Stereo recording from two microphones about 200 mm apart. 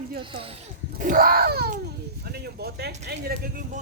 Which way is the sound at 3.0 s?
55° right (ahead or behind).